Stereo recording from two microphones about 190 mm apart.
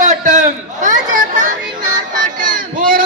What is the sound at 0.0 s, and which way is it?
Chatter, 40° right (ahead or behind).